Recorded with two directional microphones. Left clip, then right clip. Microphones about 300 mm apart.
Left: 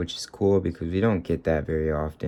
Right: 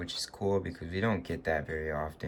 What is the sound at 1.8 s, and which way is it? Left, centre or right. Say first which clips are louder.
Speech: left 8 dB; left.